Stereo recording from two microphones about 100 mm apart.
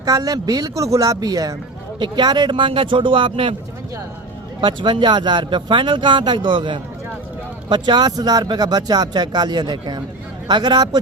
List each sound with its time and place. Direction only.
0.0 s speech: 35° right (ahead or behind); by 3.5 s 55° right (ahead or behind)
4.6 s speech: 50° right (ahead or behind)